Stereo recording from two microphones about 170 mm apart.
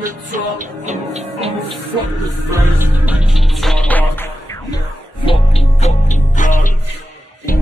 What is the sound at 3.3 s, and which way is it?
Music, centre (ahead or behind).